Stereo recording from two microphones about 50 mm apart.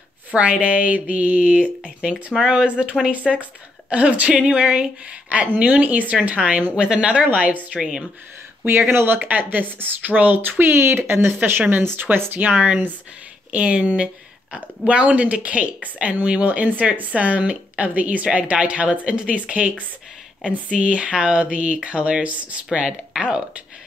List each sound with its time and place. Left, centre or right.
0.3 s a woman's voice: right
3.3 s a woman's voice: centre
3.9 s a woman's voice: right
8.6 s speech: right
12.4 s speech: right
13.5 s a woman's voice: right
20.7 s a woman's voice: right